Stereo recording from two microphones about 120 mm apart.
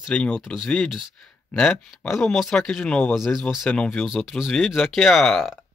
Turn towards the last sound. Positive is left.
turn(degrees=5)  # may be behind; listen again after turning